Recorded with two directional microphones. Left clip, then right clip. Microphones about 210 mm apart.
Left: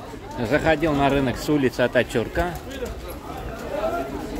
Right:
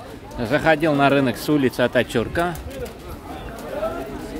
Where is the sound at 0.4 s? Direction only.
20° right (ahead or behind).